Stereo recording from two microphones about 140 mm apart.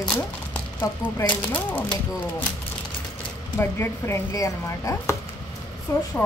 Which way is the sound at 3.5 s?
20° left (ahead or behind).